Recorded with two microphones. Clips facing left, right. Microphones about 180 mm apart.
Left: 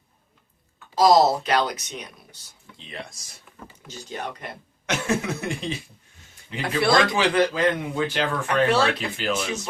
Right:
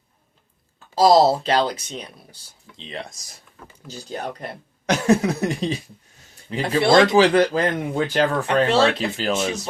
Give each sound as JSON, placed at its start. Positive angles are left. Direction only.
{"t": 0.9, "sound": "speech", "side_deg": -30}
{"t": 7.3, "sound": "speech", "side_deg": -40}
{"t": 8.4, "sound": "speech", "side_deg": -25}